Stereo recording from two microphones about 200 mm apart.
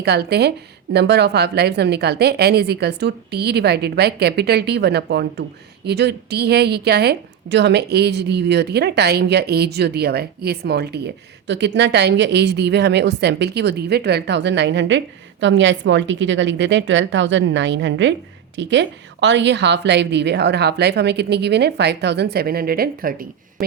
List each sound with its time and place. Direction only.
0.0 s a woman's voice: 55° right (ahead or behind)